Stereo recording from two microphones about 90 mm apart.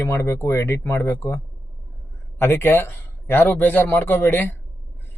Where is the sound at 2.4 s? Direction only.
25° left (ahead or behind).